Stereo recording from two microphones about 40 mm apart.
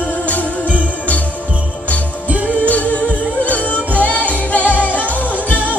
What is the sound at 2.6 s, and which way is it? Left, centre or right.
Music, left.